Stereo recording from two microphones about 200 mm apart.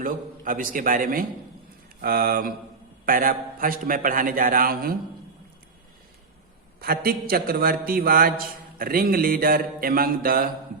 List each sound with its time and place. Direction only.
0.0 s a man's voice: 45° right (ahead or behind)
6.7 s a man's voice: 45° right (ahead or behind)